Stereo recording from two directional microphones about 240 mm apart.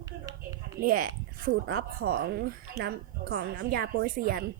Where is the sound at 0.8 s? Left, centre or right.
Right.